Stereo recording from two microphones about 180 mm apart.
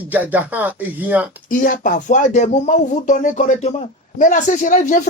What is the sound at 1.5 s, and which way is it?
Speech, 45° left (ahead or behind).